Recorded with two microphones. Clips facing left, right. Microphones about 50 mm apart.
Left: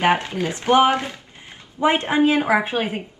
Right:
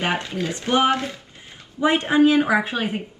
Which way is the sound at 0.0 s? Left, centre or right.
Left.